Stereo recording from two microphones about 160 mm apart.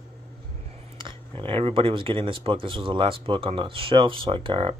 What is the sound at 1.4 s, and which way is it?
Speech, 35° right (ahead or behind).